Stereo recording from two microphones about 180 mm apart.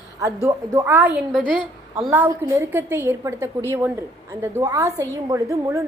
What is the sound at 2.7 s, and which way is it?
A woman's voice, 15° right (ahead or behind).